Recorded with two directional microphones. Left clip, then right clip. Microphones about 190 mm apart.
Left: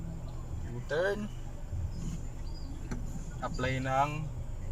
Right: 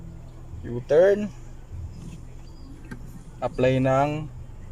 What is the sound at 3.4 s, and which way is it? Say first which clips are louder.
Speech: right 13 dB; 65° right (ahead or behind).